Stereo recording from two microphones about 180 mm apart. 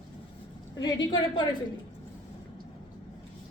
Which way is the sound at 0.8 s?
25° left (ahead or behind).